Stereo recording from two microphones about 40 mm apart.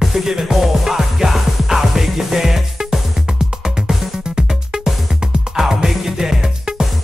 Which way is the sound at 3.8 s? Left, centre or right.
Centre.